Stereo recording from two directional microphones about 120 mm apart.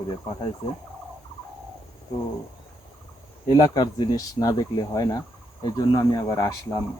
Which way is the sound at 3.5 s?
35° left (ahead or behind).